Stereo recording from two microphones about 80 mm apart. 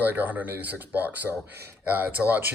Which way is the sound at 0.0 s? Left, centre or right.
Right.